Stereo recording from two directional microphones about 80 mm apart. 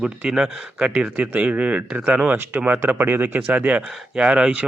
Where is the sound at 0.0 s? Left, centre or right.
Centre.